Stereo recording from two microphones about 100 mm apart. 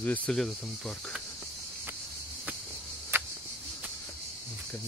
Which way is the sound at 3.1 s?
25° right (ahead or behind).